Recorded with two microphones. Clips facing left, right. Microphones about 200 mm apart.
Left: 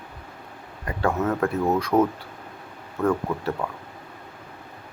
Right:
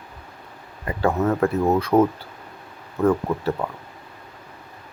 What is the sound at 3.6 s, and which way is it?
Speech, 5° right (ahead or behind).